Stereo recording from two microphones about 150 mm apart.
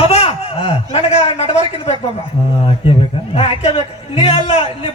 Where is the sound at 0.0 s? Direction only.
40° left (ahead or behind).